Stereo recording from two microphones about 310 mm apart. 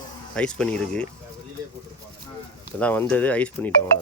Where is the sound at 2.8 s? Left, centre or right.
Centre.